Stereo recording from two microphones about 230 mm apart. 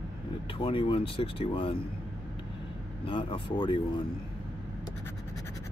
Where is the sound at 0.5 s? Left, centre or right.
Left.